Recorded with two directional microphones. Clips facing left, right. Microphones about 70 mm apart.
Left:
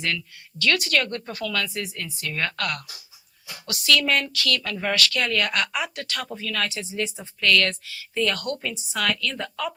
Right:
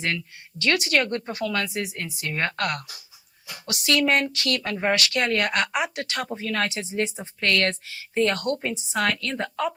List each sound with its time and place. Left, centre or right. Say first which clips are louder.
0.6 s speech: right 1 dB; right
3.8 s a woman's voice: right 1 dB; right